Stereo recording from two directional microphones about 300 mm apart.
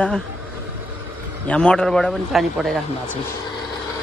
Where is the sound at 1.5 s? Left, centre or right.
Centre.